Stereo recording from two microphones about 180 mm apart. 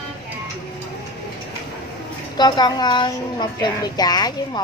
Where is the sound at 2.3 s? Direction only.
25° left (ahead or behind).